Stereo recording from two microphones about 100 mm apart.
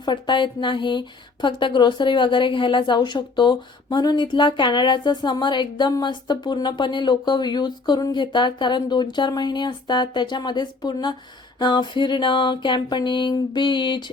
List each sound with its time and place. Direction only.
0.0 s a woman's voice: 50° left (ahead or behind)